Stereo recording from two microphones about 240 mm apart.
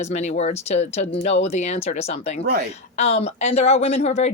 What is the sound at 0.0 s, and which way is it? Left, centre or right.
A woman's voice, left.